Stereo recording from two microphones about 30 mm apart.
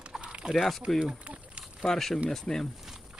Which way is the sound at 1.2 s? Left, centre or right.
Right.